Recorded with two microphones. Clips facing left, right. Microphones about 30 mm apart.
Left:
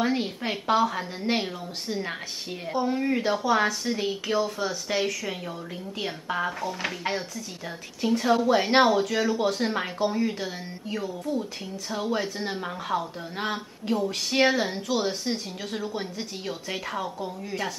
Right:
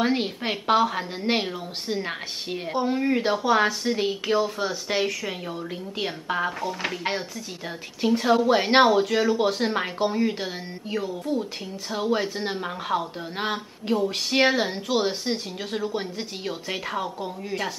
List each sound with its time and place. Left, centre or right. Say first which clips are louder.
0.0 s speech: right 2 dB; right